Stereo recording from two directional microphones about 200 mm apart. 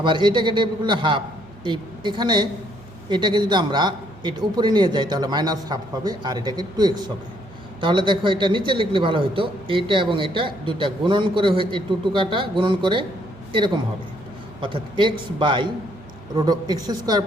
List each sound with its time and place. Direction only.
0.0 s a man's voice: 25° right (ahead or behind)